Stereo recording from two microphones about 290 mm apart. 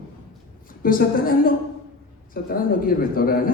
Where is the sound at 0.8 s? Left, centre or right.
Left.